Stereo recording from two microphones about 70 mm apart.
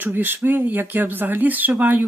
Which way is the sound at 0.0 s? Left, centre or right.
Right.